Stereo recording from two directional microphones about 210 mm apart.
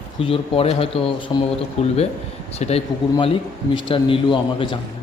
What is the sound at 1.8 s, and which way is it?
Speech, 30° left (ahead or behind).